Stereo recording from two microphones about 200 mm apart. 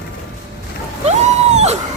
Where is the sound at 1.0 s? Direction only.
30° right (ahead or behind).